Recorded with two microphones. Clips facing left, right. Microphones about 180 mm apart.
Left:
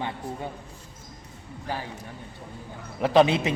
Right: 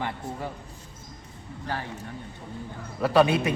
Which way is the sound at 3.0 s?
20° left (ahead or behind).